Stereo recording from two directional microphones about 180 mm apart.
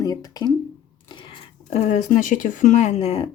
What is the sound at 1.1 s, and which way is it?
A woman's voice, 30° left (ahead or behind).